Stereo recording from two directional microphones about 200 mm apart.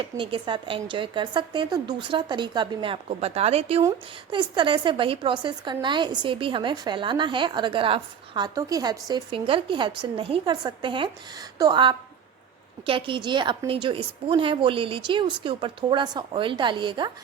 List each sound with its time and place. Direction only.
0.2 s a woman's voice: 25° right (ahead or behind)